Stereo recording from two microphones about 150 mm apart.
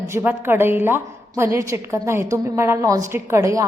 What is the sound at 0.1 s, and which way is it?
A woman's voice, 15° right (ahead or behind).